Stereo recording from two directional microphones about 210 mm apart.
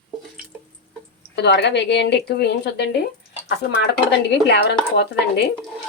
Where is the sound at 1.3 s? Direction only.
50° left (ahead or behind).